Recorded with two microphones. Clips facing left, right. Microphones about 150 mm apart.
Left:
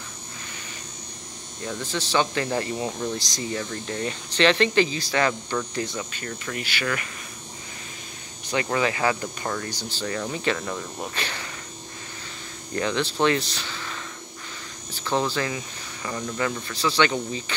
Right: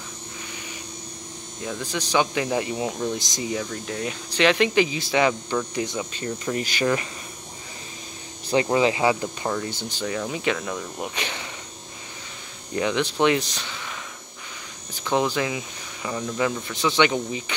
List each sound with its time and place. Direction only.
1.6 s speech: 10° right (ahead or behind)
6.5 s cricket: 30° right (ahead or behind)
8.5 s speech: 25° right (ahead or behind); by 11.1 s 5° right (ahead or behind)
11.1 s speech: 15° right (ahead or behind)
12.7 s speech: 15° right (ahead or behind)
13.7 s a sound: 10° right (ahead or behind)
15.0 s speech: 15° right (ahead or behind)